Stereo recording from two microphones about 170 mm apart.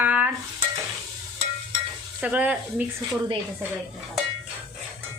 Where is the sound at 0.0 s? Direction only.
10° right (ahead or behind).